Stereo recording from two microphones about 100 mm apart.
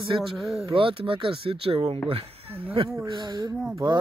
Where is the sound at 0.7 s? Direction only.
65° right (ahead or behind).